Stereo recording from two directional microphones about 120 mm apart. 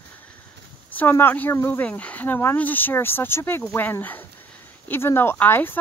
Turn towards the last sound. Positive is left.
turn(degrees=15)  # may be behind; listen again after turning